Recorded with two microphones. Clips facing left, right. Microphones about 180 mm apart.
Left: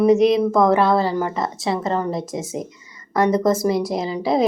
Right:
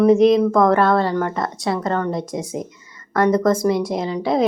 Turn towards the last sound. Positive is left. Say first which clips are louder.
# even
turn(degrees=0)  # may be behind; listen again after turning